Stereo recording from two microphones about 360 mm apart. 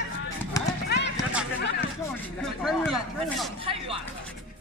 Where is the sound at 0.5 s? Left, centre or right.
Centre.